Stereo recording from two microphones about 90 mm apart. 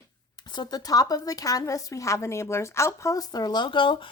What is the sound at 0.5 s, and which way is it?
A woman's voice, 50° left (ahead or behind).